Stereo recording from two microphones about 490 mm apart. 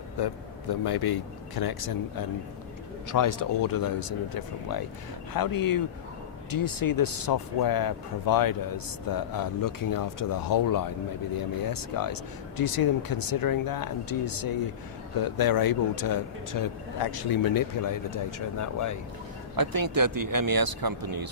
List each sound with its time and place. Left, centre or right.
0.2 s speech: left
19.5 s speech: right